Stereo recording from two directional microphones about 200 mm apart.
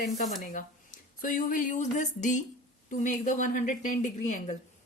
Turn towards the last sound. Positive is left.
turn(degrees=35)  # may be behind; listen again after turning